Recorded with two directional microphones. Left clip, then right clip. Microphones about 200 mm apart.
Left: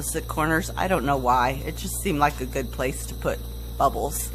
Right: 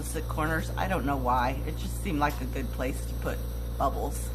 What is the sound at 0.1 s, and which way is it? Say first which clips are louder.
Speech: left 7 dB; 50° left (ahead or behind).